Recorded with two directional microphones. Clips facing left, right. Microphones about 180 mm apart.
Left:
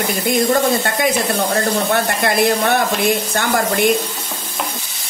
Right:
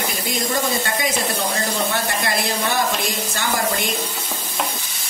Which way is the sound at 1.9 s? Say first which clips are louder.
Left 6 dB; 55° left (ahead or behind).